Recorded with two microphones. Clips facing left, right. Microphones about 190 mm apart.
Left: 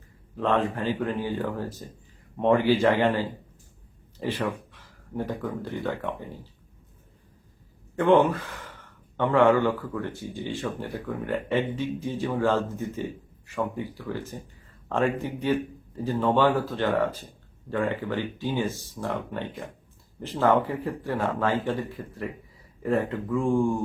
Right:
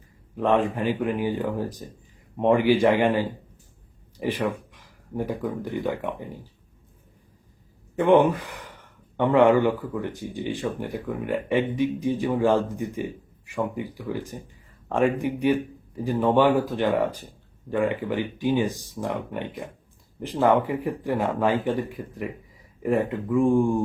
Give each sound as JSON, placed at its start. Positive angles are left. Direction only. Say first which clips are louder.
{"t": 0.3, "sound": "speech", "louder": "right 3 dB", "side_deg": -15}
{"t": 7.9, "sound": "speech", "louder": "right 2 dB", "side_deg": -15}